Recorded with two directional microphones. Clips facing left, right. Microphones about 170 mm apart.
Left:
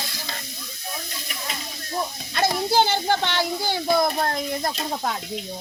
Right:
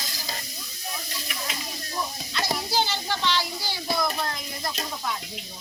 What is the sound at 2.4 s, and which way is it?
A child's voice, 55° left (ahead or behind).